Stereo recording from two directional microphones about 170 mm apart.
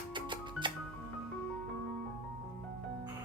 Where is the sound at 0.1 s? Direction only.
30° right (ahead or behind).